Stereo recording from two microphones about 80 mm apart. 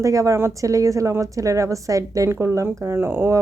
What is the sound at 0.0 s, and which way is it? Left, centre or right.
Speech, right.